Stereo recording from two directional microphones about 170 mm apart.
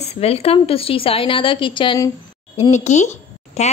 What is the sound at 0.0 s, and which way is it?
A woman's voice, 35° left (ahead or behind).